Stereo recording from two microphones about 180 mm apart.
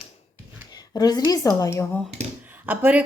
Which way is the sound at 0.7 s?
20° left (ahead or behind).